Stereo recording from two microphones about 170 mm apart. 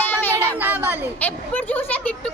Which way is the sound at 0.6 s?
10° right (ahead or behind).